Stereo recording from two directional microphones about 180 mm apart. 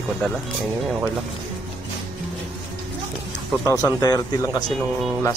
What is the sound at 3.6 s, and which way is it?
Speech, 20° left (ahead or behind).